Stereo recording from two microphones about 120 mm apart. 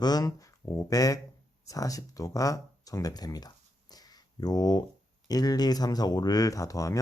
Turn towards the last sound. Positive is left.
turn(degrees=30)  # may be behind; listen again after turning